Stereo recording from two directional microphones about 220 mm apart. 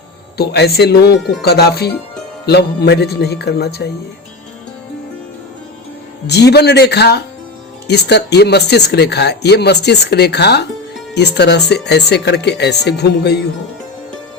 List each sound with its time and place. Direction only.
0.3 s speech: 50° left (ahead or behind)
6.2 s speech: 50° left (ahead or behind)